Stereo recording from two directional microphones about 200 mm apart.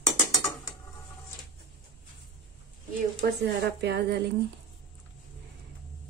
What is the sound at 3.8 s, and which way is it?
Speech, 55° right (ahead or behind).